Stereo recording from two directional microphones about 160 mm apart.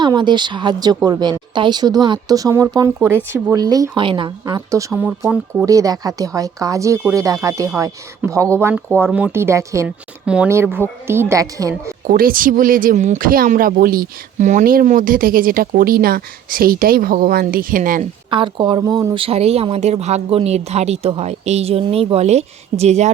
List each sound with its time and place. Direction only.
0.0 s speech: 30° right (ahead or behind)
4.9 s a woman's voice: 10° right (ahead or behind)
5.6 s a woman's voice: 20° right (ahead or behind)
12.0 s speech: 65° right (ahead or behind)
18.3 s speech: 30° right (ahead or behind)
19.2 s speech: 40° right (ahead or behind)